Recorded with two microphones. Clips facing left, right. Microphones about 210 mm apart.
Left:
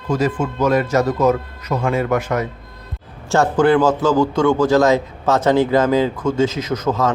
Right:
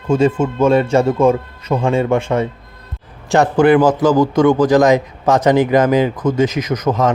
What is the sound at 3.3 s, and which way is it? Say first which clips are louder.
A man's voice: right 3 dB; 15° right (ahead or behind).